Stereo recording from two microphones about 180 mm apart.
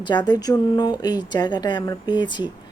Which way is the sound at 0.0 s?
25° left (ahead or behind).